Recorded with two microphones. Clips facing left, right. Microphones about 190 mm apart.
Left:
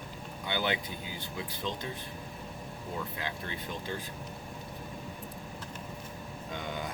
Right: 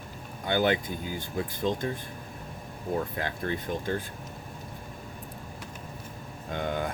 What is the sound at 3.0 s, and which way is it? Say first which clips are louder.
Speech: right 6 dB; 50° right (ahead or behind).